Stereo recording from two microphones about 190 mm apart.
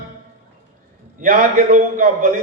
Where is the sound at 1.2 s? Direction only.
50° right (ahead or behind).